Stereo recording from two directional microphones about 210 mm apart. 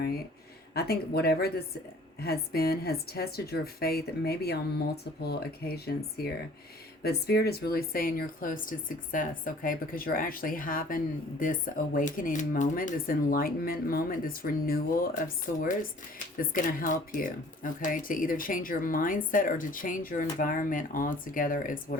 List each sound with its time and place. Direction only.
0.7 s a woman's voice: 50° left (ahead or behind)